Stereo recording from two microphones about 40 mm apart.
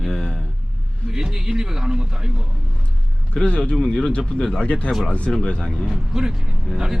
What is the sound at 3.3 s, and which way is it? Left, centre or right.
Speech, left.